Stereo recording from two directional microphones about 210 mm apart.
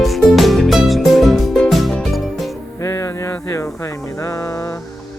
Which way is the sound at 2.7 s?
15° left (ahead or behind).